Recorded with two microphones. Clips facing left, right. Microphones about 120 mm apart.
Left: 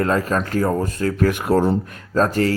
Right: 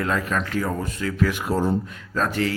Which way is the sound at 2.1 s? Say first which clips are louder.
Left 6 dB; 40° left (ahead or behind).